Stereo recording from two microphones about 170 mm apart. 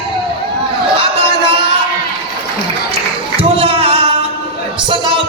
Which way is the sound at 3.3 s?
35° right (ahead or behind).